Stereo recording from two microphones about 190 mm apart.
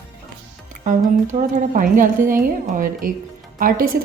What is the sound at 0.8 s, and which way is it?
A woman's voice, 40° right (ahead or behind).